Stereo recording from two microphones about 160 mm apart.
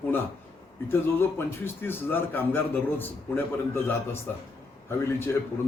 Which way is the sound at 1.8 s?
15° left (ahead or behind).